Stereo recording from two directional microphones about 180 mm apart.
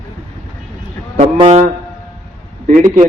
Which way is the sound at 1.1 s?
35° right (ahead or behind).